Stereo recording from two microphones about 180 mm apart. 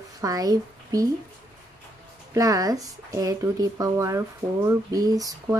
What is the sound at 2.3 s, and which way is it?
Speech, 20° right (ahead or behind).